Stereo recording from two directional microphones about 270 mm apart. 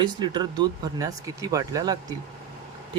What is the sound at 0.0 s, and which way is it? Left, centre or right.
Speech, centre.